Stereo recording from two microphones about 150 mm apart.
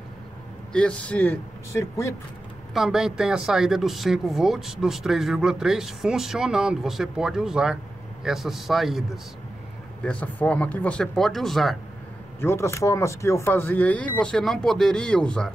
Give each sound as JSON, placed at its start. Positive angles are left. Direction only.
{"t": 0.7, "sound": "speech", "side_deg": 10}
{"t": 2.7, "sound": "speech", "side_deg": 0}
{"t": 12.4, "sound": "speech", "side_deg": 15}